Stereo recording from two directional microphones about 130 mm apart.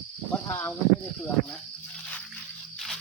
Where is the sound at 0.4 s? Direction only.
20° left (ahead or behind).